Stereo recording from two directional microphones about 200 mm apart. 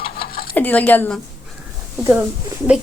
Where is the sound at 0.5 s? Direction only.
10° left (ahead or behind).